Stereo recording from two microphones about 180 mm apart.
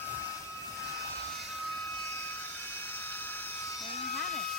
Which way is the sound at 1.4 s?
Centre (ahead or behind).